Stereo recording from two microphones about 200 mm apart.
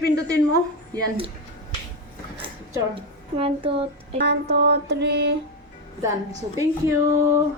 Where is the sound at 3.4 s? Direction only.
30° right (ahead or behind).